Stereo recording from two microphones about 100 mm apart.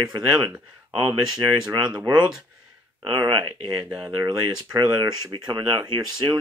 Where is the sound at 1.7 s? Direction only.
45° right (ahead or behind).